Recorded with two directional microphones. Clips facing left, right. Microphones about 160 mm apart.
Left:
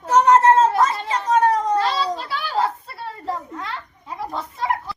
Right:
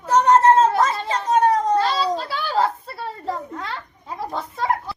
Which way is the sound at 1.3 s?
35° right (ahead or behind).